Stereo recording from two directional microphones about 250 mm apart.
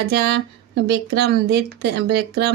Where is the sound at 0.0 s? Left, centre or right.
Right.